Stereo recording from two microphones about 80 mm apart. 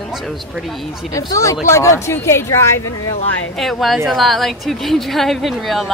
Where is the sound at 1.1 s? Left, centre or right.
Left.